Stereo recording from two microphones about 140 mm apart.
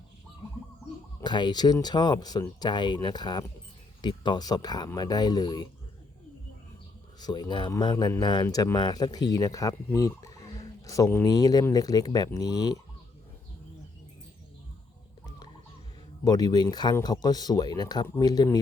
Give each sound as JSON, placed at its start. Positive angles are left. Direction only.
{"t": 1.2, "sound": "speech", "side_deg": 30}
{"t": 7.2, "sound": "speech", "side_deg": 30}
{"t": 16.2, "sound": "speech", "side_deg": 30}